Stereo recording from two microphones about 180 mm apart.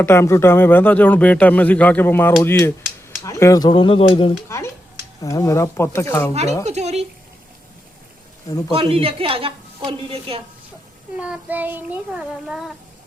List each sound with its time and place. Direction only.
0.0 s speech: 15° left (ahead or behind)
3.7 s speech: 30° left (ahead or behind)
4.4 s speech: 15° left (ahead or behind)
6.7 s a woman's voice: 40° right (ahead or behind)
8.7 s a woman's voice: 30° right (ahead or behind)
11.2 s child singing: 10° right (ahead or behind)